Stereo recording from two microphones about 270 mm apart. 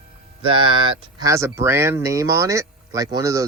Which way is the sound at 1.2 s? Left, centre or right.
Centre.